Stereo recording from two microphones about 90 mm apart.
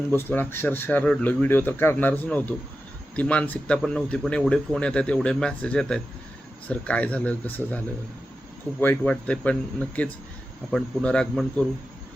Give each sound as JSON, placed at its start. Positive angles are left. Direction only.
{"t": 0.1, "sound": "a man's voice", "side_deg": 20}
{"t": 9.0, "sound": "speech", "side_deg": 15}